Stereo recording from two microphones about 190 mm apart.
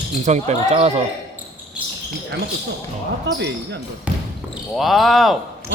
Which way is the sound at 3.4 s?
65° right (ahead or behind).